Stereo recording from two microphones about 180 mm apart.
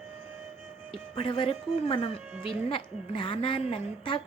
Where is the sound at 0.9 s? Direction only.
30° left (ahead or behind).